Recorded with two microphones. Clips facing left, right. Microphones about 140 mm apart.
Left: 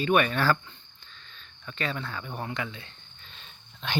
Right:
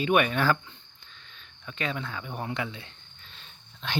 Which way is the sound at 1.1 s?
10° right (ahead or behind).